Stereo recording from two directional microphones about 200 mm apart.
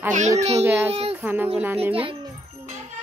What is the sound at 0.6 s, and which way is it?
Speech, 10° right (ahead or behind).